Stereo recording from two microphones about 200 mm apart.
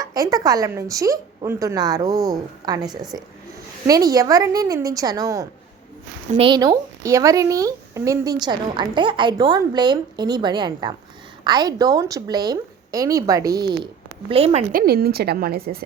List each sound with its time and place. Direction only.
0.0 s a woman's voice: 20° right (ahead or behind)
14.3 s speech: 30° right (ahead or behind)
14.7 s a woman's voice: 45° right (ahead or behind)